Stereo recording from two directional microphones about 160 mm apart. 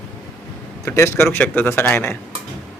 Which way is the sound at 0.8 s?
15° left (ahead or behind).